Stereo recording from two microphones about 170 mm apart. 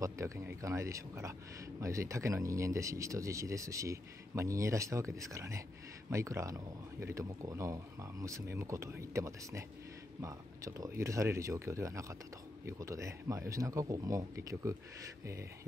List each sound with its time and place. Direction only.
0.0 s speech: 15° right (ahead or behind)